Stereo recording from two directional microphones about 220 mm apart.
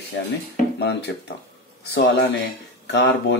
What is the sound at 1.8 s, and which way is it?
Speech, 50° left (ahead or behind).